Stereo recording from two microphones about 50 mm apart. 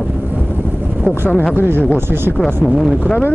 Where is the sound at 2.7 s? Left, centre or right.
Centre.